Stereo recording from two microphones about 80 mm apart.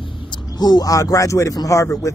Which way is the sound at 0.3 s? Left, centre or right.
Left.